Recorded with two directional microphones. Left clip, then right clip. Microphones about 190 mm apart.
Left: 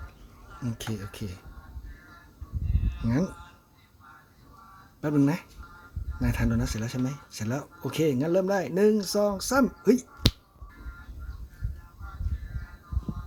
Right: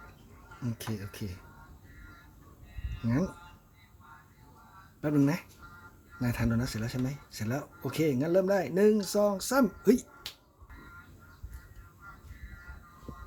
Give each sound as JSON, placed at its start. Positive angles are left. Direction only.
{"t": 0.6, "sound": "speech", "side_deg": 15}
{"t": 3.0, "sound": "speech", "side_deg": 15}
{"t": 4.9, "sound": "speech", "side_deg": 10}